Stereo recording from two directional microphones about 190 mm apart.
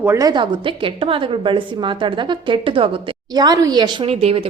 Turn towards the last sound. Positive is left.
turn(degrees=-30)  # may be behind; listen again after turning